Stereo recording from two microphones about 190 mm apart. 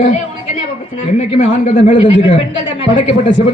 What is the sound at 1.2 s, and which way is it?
Speech, 40° left (ahead or behind).